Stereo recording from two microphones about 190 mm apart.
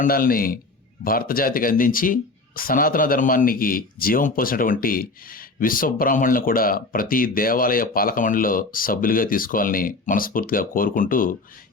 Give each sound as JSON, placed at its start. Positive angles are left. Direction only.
{"t": 0.0, "sound": "speech", "side_deg": 50}